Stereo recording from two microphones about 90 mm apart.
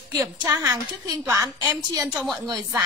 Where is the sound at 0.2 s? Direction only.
40° right (ahead or behind).